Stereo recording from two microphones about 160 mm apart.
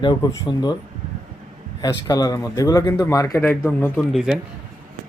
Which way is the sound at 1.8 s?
25° left (ahead or behind).